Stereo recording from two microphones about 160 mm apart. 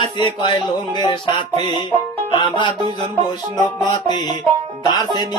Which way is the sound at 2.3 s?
30° left (ahead or behind).